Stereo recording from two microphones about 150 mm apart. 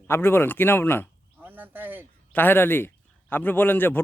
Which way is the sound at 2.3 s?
15° left (ahead or behind).